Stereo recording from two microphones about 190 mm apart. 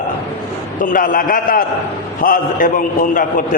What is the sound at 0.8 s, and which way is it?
A man's voice, 45° left (ahead or behind).